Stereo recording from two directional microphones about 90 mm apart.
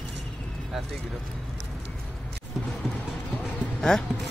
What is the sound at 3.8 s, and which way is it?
Speech, 5° left (ahead or behind).